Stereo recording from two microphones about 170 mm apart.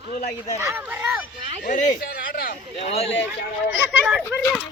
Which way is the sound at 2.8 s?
40° left (ahead or behind).